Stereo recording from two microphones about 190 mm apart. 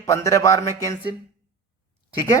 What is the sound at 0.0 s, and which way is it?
Speech, 15° left (ahead or behind).